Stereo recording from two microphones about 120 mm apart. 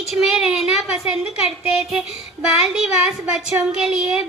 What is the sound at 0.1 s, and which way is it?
A woman's voice, 5° right (ahead or behind).